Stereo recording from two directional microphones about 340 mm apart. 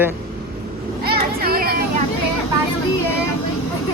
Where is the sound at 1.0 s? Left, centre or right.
Right.